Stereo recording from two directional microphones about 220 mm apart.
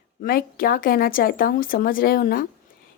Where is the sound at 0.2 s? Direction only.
40° left (ahead or behind).